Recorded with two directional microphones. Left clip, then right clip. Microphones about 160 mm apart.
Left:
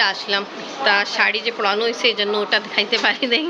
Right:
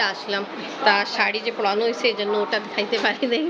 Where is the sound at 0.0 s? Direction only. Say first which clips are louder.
Left 4 dB; centre (ahead or behind).